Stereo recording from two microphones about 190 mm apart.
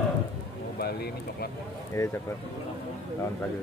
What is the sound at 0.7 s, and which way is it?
Speech, 55° left (ahead or behind).